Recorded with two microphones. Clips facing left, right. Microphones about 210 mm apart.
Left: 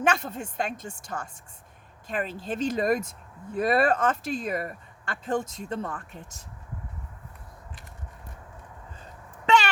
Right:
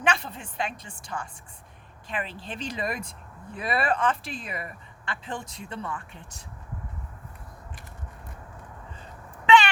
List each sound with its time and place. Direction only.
0.0 s speech: 45° left (ahead or behind)